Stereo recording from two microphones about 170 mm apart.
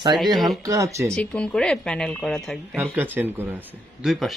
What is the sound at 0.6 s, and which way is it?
Speech, 20° right (ahead or behind).